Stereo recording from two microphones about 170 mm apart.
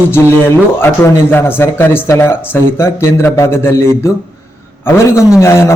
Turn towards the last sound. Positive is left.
turn(degrees=15)  # may be behind; listen again after turning